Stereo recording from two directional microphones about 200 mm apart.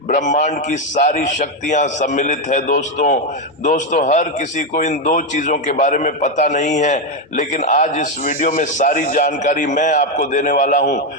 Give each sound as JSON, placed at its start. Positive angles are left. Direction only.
{"t": 0.1, "sound": "a man's voice", "side_deg": 35}